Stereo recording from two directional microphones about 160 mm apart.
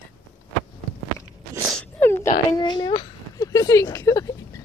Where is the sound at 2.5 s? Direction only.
25° left (ahead or behind).